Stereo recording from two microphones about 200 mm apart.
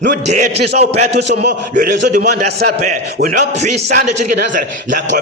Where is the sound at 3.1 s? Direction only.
50° right (ahead or behind).